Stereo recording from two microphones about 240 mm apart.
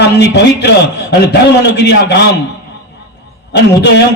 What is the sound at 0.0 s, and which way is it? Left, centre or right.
A man's voice, left.